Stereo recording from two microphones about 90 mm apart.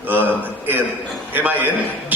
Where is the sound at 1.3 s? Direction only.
20° right (ahead or behind).